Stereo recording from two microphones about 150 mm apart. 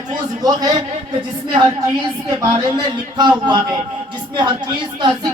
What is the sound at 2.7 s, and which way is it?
Speech, 30° right (ahead or behind).